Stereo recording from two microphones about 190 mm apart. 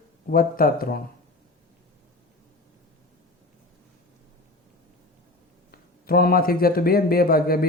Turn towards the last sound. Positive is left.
turn(degrees=50)  # may be behind; listen again after turning